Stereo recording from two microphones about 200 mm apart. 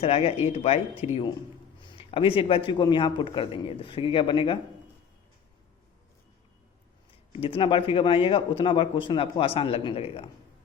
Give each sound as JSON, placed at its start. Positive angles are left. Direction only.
{"t": 0.0, "sound": "a man's voice", "side_deg": 30}
{"t": 7.3, "sound": "a man's voice", "side_deg": 30}